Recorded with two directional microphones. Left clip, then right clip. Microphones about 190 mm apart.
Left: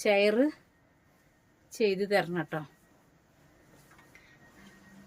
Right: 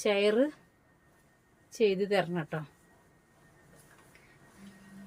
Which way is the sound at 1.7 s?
25° left (ahead or behind).